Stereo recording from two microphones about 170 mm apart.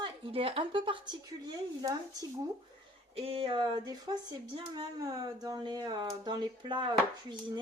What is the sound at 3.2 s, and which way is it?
Speech, 35° right (ahead or behind).